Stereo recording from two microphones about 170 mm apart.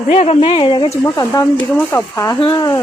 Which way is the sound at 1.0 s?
20° left (ahead or behind).